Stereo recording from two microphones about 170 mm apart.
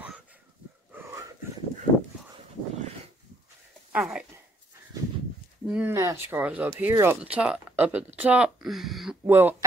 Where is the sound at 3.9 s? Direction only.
5° right (ahead or behind).